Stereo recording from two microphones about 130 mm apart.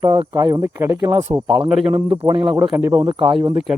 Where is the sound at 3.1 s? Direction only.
40° right (ahead or behind).